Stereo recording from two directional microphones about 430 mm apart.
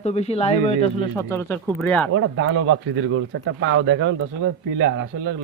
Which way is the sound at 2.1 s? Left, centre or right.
Right.